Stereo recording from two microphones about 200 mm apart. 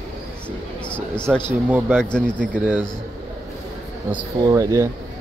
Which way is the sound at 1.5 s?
10° right (ahead or behind).